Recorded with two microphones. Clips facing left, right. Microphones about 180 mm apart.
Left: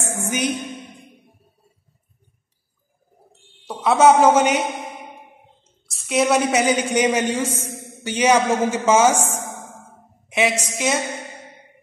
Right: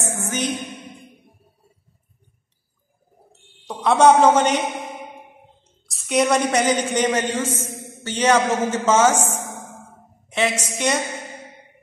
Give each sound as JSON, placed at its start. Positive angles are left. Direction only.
{"t": 0.0, "sound": "a sound", "side_deg": 10}
{"t": 3.6, "sound": "a woman's voice", "side_deg": 5}
{"t": 5.9, "sound": "a woman's voice", "side_deg": 0}